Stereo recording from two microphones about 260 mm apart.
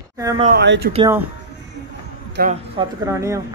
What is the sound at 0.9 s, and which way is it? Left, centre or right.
Speech, centre.